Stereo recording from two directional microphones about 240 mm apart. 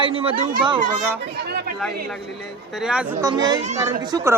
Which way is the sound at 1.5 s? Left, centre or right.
Right.